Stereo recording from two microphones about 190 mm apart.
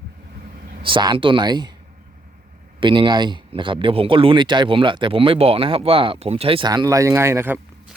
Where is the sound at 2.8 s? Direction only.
25° right (ahead or behind).